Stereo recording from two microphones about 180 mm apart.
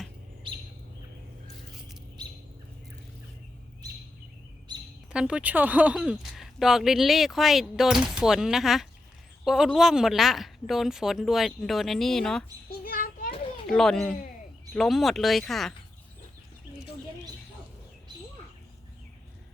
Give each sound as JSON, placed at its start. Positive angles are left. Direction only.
{"t": 5.1, "sound": "speech", "side_deg": -5}
{"t": 12.8, "sound": "children playing", "side_deg": 55}
{"t": 13.7, "sound": "speech", "side_deg": 0}